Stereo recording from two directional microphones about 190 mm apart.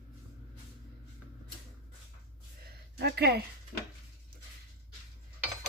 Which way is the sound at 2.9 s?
60° right (ahead or behind).